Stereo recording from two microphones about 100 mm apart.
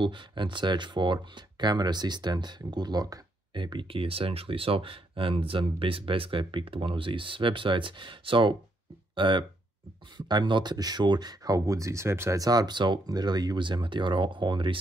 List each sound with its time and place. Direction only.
0.0 s speech: 55° right (ahead or behind)
3.5 s speech: 55° right (ahead or behind)